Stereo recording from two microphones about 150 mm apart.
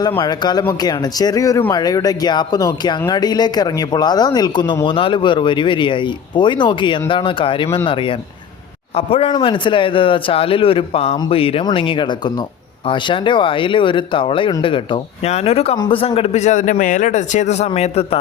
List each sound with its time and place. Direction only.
0.2 s speech: 25° left (ahead or behind)
9.0 s speech: 40° left (ahead or behind)